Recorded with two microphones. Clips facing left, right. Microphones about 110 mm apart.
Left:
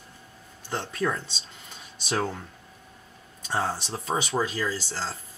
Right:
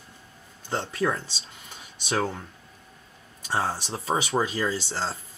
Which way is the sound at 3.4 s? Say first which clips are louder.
Right 1 dB; 5° right (ahead or behind).